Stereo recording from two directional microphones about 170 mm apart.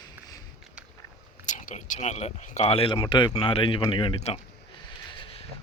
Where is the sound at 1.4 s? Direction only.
50° left (ahead or behind); by 4.4 s 30° left (ahead or behind).